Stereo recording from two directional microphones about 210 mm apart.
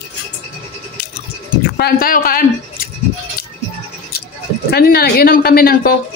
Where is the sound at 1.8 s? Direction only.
45° left (ahead or behind).